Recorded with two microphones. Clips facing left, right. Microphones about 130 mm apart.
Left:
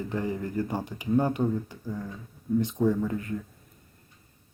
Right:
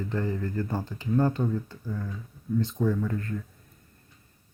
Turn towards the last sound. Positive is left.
turn(degrees=15)  # may be behind; listen again after turning